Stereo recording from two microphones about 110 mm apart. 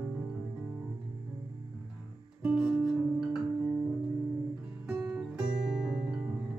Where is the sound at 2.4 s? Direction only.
10° right (ahead or behind).